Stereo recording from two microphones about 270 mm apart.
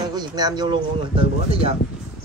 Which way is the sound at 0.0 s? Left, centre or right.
Centre.